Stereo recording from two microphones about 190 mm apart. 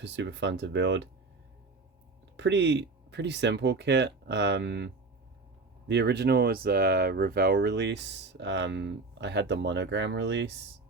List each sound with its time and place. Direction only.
0.0 s speech: 70° right (ahead or behind)
2.3 s speech: 70° right (ahead or behind)
5.9 s speech: 65° right (ahead or behind)